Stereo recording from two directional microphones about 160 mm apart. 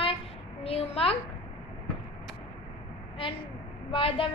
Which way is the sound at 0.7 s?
40° left (ahead or behind).